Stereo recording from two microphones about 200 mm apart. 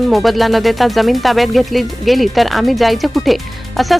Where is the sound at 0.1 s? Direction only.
Centre (ahead or behind).